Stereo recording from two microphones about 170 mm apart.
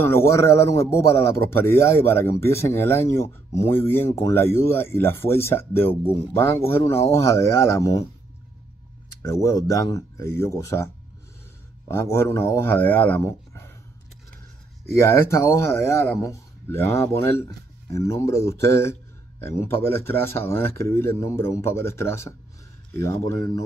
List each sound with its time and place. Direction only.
0.0 s speech: 15° left (ahead or behind)
9.2 s speech: 20° left (ahead or behind)
11.9 s speech: 15° left (ahead or behind)
15.0 s speech: 15° left (ahead or behind)